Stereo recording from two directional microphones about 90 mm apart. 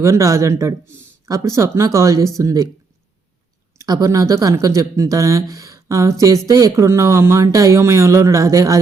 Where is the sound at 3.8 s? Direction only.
45° right (ahead or behind).